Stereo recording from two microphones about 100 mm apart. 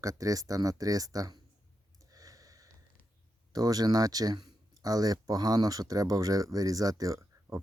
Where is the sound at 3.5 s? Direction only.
40° right (ahead or behind).